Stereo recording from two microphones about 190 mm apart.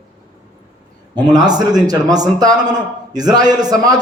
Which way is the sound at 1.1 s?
20° right (ahead or behind).